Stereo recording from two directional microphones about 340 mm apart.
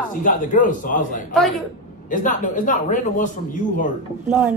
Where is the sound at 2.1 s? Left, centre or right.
Left.